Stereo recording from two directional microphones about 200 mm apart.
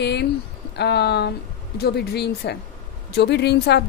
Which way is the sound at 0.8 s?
55° left (ahead or behind).